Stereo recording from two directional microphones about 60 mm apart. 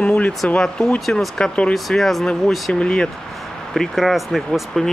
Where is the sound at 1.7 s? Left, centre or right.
Centre.